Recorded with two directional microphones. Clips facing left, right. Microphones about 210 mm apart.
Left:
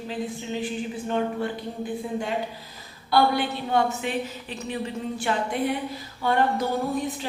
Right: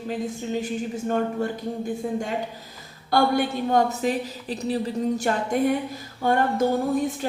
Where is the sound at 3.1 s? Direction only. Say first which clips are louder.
Right 1 dB; 45° right (ahead or behind).